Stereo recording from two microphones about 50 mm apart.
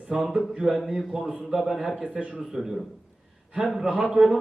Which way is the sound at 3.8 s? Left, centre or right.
Centre.